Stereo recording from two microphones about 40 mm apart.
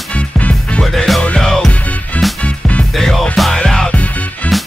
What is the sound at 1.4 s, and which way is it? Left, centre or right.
Music, centre.